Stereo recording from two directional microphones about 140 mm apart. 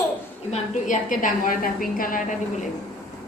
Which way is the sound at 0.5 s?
65° left (ahead or behind).